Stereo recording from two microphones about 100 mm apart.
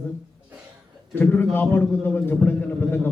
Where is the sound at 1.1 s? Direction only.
20° left (ahead or behind).